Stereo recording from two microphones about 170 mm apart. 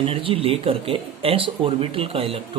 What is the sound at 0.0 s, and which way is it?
Speech, 35° right (ahead or behind).